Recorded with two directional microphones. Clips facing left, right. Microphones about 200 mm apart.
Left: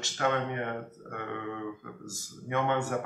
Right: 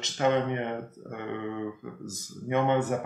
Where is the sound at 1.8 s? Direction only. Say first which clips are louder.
Right 4 dB; 20° right (ahead or behind).